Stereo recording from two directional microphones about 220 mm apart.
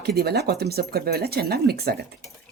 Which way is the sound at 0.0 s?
45° right (ahead or behind).